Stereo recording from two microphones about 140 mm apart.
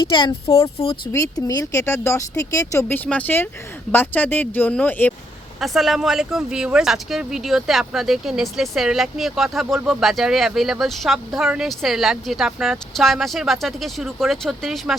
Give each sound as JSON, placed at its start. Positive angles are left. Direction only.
{"t": 0.0, "sound": "speech", "side_deg": 35}
{"t": 1.1, "sound": "speech", "side_deg": 25}
{"t": 5.5, "sound": "speech", "side_deg": 0}